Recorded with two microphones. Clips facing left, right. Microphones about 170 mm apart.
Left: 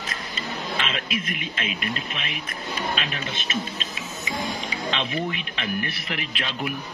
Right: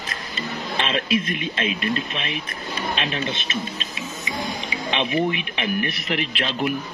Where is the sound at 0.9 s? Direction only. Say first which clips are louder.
Right 7 dB; 30° right (ahead or behind).